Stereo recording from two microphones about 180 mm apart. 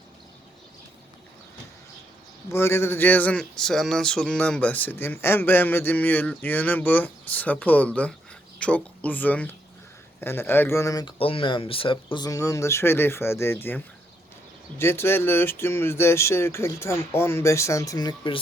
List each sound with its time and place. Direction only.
2.5 s speech: 15° left (ahead or behind)
11.2 s speech: 30° left (ahead or behind)